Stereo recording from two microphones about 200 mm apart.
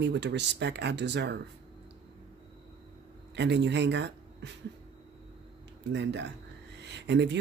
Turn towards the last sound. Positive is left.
turn(degrees=-60)  # may be behind; listen again after turning